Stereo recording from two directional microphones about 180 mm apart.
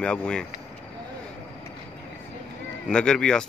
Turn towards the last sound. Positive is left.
turn(degrees=5)  # may be behind; listen again after turning